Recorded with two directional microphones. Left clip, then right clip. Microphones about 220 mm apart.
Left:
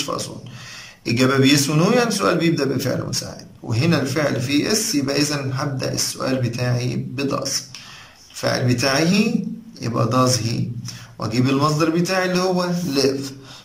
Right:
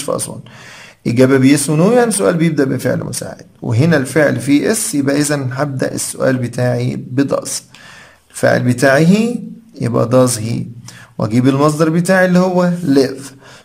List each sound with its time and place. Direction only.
1.0 s a man's voice: 35° right (ahead or behind)